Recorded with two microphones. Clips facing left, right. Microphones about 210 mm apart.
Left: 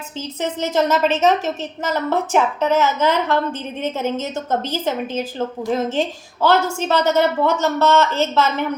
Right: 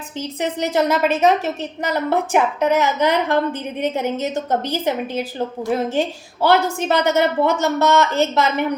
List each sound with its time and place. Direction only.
0.2 s a woman's voice: 15° right (ahead or behind)